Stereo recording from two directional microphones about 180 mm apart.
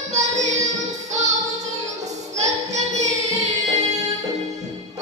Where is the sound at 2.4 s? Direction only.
40° right (ahead or behind).